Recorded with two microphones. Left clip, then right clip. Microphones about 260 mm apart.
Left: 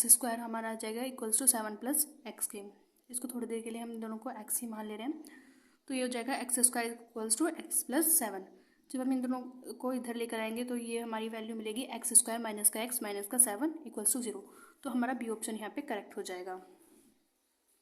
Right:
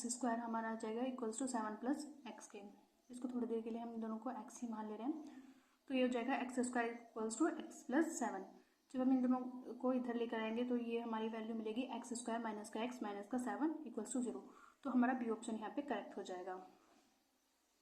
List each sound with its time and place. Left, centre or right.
0.0 s a woman's voice: left